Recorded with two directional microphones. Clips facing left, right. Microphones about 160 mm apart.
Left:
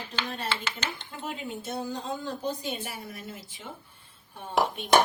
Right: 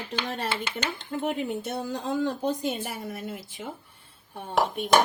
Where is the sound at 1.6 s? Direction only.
70° right (ahead or behind).